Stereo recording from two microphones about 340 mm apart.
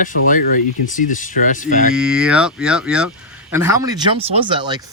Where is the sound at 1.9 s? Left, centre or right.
Centre.